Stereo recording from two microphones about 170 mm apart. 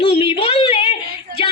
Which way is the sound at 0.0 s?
35° left (ahead or behind).